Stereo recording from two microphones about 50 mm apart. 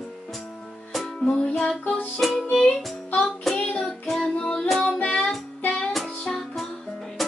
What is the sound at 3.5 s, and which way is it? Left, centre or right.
Child singing, left.